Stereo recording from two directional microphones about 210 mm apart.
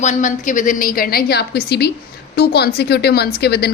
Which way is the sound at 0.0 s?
35° left (ahead or behind).